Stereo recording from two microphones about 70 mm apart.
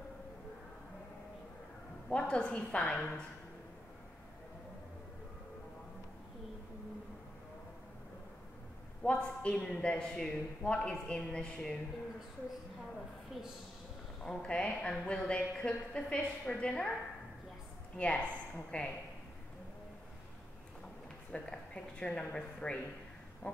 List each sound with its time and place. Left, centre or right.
2.0 s a man's voice: centre
9.0 s a man's voice: centre
14.2 s a man's voice: centre
17.9 s a man's voice: centre
21.3 s a man's voice: centre
23.4 s a sound: centre